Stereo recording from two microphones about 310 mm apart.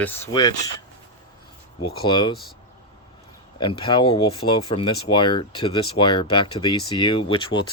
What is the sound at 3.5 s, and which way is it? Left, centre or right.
Speech, centre.